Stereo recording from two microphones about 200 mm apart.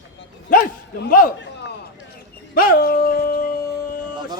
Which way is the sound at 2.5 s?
45° left (ahead or behind).